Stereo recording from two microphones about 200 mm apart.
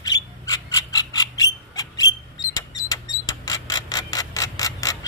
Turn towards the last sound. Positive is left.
turn(degrees=15)  # may be behind; listen again after turning